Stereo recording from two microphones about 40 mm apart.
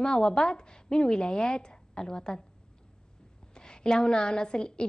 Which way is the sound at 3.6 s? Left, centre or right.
Centre.